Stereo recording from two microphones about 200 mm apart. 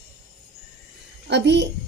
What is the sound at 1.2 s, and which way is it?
Speech, 60° right (ahead or behind).